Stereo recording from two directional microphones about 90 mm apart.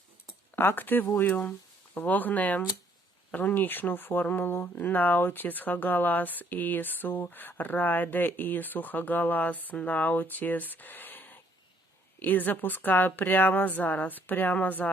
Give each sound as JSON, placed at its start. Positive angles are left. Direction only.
{"t": 0.5, "sound": "speech", "side_deg": 25}